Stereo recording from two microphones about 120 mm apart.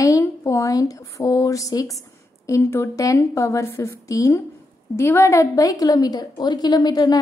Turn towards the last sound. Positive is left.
turn(degrees=35)  # may be behind; listen again after turning